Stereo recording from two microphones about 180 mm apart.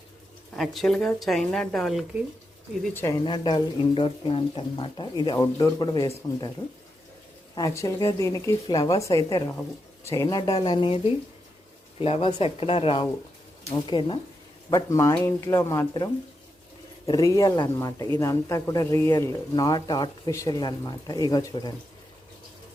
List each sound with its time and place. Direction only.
0.5 s speech: centre (ahead or behind)
2.9 s speech: 15° left (ahead or behind)
3.2 s speech: 25° left (ahead or behind)
7.5 s speech: 20° left (ahead or behind)
17.1 s speech: 20° left (ahead or behind)